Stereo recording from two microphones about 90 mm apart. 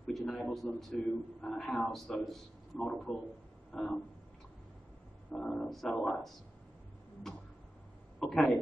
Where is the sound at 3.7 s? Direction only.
5° left (ahead or behind).